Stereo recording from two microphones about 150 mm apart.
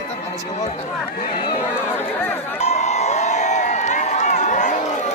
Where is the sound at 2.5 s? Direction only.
50° left (ahead or behind).